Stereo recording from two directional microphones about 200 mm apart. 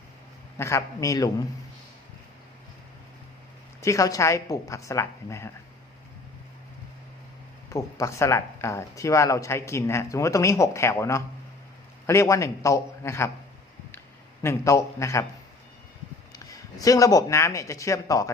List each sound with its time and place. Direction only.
0.6 s speech: 15° left (ahead or behind)
3.8 s speech: 15° left (ahead or behind)
7.7 s speech: 15° left (ahead or behind)
14.4 s speech: 15° left (ahead or behind)
16.3 s a sound: 20° left (ahead or behind)
16.8 s speech: 15° left (ahead or behind)